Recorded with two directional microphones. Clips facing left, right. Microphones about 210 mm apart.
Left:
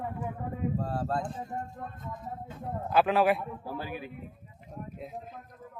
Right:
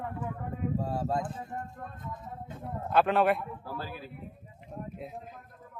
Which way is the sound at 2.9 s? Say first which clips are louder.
Even; centre (ahead or behind).